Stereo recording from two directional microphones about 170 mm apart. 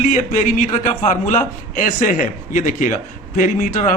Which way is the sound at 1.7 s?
50° left (ahead or behind).